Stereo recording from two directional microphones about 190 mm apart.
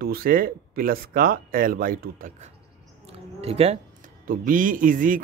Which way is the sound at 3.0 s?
30° right (ahead or behind).